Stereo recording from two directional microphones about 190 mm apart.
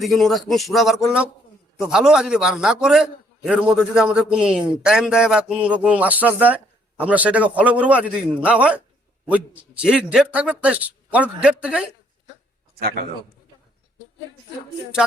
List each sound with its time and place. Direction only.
0.0 s a man's voice: centre (ahead or behind)